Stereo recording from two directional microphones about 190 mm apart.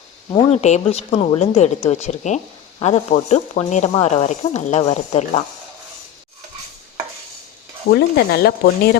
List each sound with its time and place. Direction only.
0.3 s speech: 35° left (ahead or behind)
7.9 s speech: 60° left (ahead or behind)